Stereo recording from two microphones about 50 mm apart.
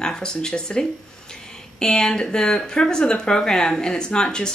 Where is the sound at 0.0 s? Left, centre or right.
Centre.